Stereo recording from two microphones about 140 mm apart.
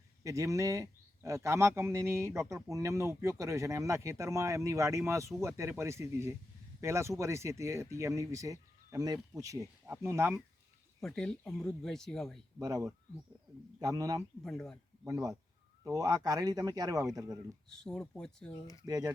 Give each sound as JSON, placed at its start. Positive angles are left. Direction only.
{"t": 0.2, "sound": "speech", "side_deg": -20}
{"t": 11.0, "sound": "speech", "side_deg": 5}
{"t": 12.5, "sound": "speech", "side_deg": -25}
{"t": 14.4, "sound": "speech", "side_deg": 5}
{"t": 15.0, "sound": "speech", "side_deg": -20}
{"t": 17.7, "sound": "speech", "side_deg": 5}
{"t": 18.5, "sound": "speech", "side_deg": 25}
{"t": 18.9, "sound": "speech", "side_deg": -25}